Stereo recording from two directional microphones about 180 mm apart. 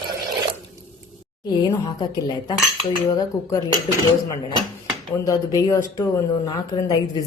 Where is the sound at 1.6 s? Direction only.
25° left (ahead or behind).